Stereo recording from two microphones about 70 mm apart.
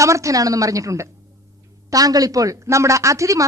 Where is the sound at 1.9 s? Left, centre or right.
Right.